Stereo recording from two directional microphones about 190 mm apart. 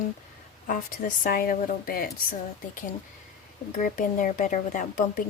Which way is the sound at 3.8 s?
45° left (ahead or behind).